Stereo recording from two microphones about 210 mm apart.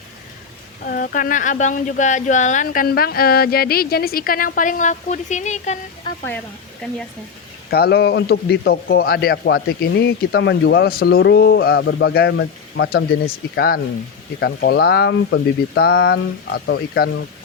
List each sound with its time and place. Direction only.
0.9 s speech: 40° left (ahead or behind)
7.7 s a man's voice: 50° left (ahead or behind)